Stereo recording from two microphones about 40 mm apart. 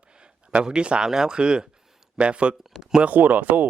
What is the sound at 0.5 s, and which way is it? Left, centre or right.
Speech, right.